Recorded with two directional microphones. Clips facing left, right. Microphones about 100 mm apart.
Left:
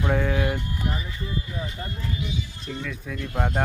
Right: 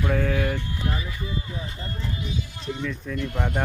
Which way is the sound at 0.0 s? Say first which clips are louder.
Even; 25° left (ahead or behind).